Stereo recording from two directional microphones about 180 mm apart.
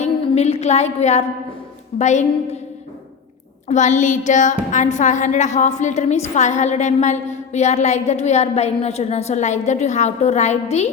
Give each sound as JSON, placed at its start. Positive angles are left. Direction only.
{"t": 0.0, "sound": "a woman's voice", "side_deg": 35}
{"t": 3.7, "sound": "a woman's voice", "side_deg": 40}